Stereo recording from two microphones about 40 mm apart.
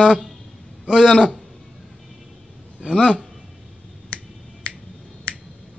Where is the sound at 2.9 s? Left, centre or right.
Left.